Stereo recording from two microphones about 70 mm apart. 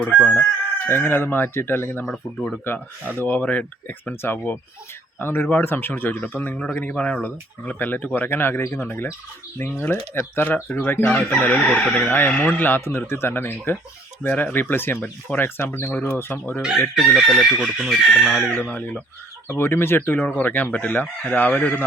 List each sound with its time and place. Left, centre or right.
0.0 s chicken: centre
0.9 s speech: left
4.1 s speech: left
11.2 s chicken: centre
11.9 s speech: left
16.6 s chicken: centre
16.9 s speech: centre
18.5 s speech: left
19.5 s speech: left
20.1 s speech: left